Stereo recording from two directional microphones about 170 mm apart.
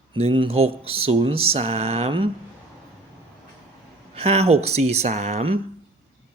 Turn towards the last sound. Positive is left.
turn(degrees=-40)  # may be behind; listen again after turning